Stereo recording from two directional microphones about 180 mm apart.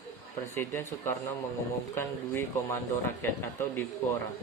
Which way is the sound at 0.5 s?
15° left (ahead or behind).